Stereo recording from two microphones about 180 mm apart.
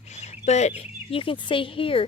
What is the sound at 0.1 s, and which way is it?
Fowl, 40° left (ahead or behind).